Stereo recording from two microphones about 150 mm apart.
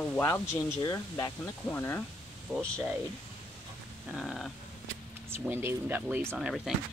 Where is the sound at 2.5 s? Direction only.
Centre (ahead or behind).